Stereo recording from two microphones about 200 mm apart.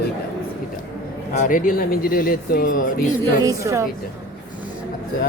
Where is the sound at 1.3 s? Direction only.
40° left (ahead or behind).